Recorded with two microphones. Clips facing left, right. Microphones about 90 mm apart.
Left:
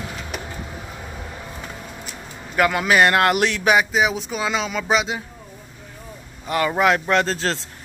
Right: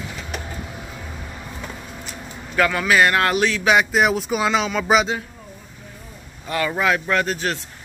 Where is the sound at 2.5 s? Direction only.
20° left (ahead or behind).